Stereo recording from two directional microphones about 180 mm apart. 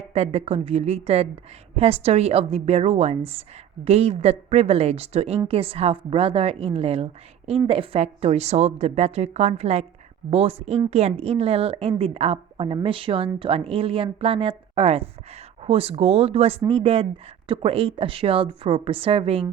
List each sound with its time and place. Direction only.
0.1 s a woman's voice: 35° right (ahead or behind)